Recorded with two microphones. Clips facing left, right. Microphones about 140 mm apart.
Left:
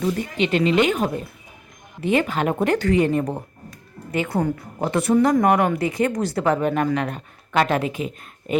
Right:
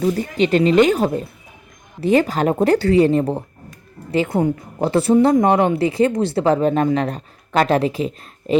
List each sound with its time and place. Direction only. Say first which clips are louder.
0.0 s a woman's voice: right 4 dB; 40° right (ahead or behind)